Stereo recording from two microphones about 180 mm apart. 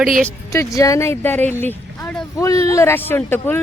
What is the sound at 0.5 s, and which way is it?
Speech, 20° left (ahead or behind).